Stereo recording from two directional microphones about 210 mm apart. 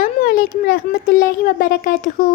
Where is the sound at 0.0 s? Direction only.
45° left (ahead or behind).